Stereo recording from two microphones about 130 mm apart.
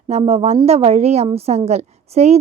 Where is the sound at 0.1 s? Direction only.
55° right (ahead or behind).